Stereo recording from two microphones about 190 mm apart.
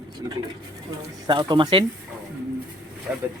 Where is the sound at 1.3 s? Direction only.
25° right (ahead or behind).